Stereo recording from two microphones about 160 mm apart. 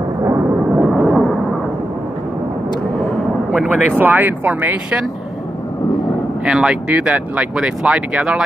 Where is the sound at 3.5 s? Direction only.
10° right (ahead or behind).